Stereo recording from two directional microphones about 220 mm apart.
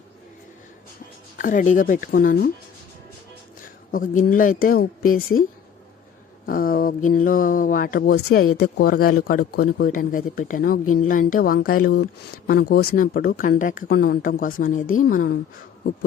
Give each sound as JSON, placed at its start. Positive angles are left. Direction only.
{"t": 1.4, "sound": "a man's voice", "side_deg": 35}
{"t": 3.9, "sound": "a man's voice", "side_deg": 40}